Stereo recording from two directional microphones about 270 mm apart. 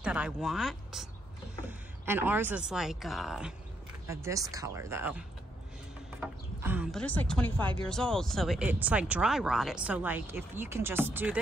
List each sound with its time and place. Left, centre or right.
0.0 s speech: centre
6.2 s speech: centre